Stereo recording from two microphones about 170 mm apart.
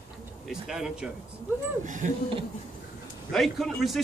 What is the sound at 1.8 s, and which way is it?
Speech, 50° right (ahead or behind).